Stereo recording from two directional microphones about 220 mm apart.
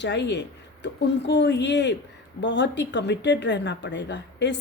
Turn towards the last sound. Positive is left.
turn(degrees=50)  # may be behind; listen again after turning